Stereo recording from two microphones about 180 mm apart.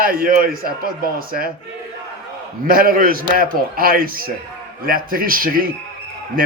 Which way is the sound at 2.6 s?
55° right (ahead or behind).